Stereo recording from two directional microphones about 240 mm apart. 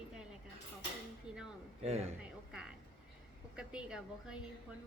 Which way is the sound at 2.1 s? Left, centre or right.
Centre.